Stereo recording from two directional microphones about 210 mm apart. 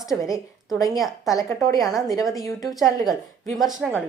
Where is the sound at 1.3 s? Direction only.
15° left (ahead or behind).